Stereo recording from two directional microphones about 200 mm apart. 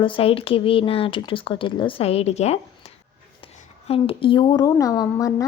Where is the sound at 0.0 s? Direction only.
25° left (ahead or behind).